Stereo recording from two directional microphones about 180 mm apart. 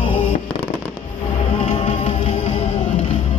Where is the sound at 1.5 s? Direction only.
30° left (ahead or behind).